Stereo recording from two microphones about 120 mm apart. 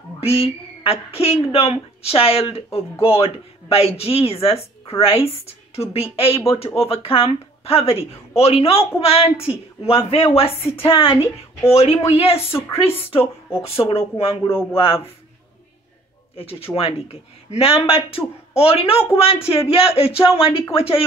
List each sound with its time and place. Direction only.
0.2 s a woman's voice: 55° left (ahead or behind)
11.7 s a woman's voice: 60° left (ahead or behind)
13.2 s speech: 25° left (ahead or behind)
13.7 s speech: 50° left (ahead or behind)
14.4 s speech: 20° left (ahead or behind)
14.7 s speech: 50° left (ahead or behind)
16.3 s a woman's voice: 50° left (ahead or behind)